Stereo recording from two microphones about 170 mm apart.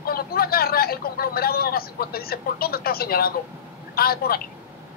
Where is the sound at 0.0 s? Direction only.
60° left (ahead or behind).